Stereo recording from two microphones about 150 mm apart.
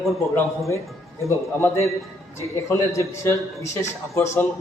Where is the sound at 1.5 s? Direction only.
15° left (ahead or behind).